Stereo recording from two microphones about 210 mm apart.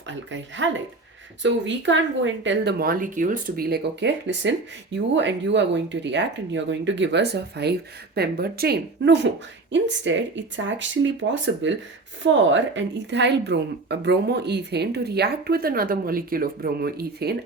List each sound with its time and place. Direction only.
0.1 s a woman's voice: 60° right (ahead or behind)